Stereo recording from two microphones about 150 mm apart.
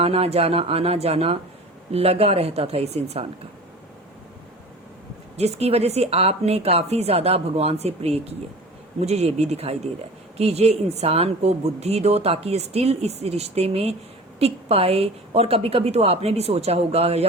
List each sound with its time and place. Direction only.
0.0 s speech: 40° right (ahead or behind)
5.4 s speech: 45° right (ahead or behind)